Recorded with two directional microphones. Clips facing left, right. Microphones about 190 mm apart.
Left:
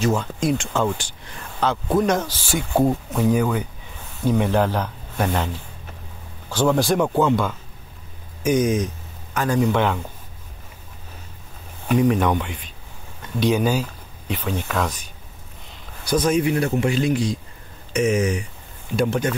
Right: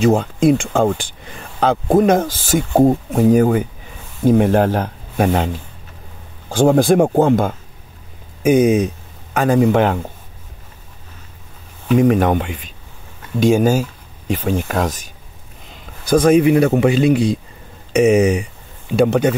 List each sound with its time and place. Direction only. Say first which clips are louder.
0.0 s speech: right 8 dB; 55° right (ahead or behind)
6.5 s speech: right 7 dB; 50° right (ahead or behind)
12.0 s speech: right 5 dB; 50° right (ahead or behind)
16.1 s speech: right 8 dB; 50° right (ahead or behind)
16.3 s speech: right 8 dB; 65° right (ahead or behind)